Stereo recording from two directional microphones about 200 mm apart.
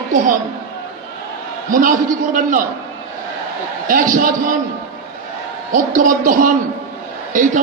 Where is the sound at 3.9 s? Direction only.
40° right (ahead or behind).